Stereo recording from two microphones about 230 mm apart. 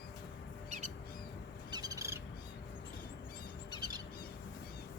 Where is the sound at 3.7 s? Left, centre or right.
Centre.